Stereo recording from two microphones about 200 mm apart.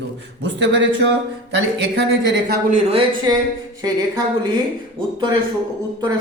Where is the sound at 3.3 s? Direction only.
20° right (ahead or behind).